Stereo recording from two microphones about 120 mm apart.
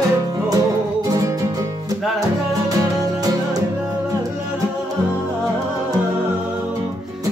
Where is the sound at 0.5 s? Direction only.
30° right (ahead or behind).